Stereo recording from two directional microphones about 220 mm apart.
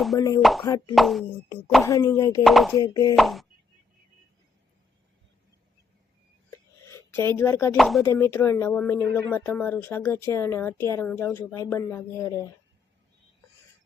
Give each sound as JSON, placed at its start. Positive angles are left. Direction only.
{"t": 0.4, "sound": "speech", "side_deg": 0}
{"t": 1.9, "sound": "speech", "side_deg": 15}
{"t": 2.4, "sound": "speech", "side_deg": 0}
{"t": 2.8, "sound": "speech", "side_deg": 15}
{"t": 3.2, "sound": "speech", "side_deg": 0}
{"t": 6.9, "sound": "speech", "side_deg": 10}
{"t": 7.8, "sound": "speech", "side_deg": 0}
{"t": 8.0, "sound": "speech", "side_deg": 10}